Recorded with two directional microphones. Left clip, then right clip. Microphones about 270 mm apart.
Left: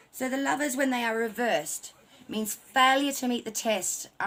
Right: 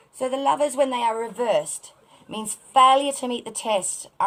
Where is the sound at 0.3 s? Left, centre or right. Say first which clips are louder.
Right 7 dB; left.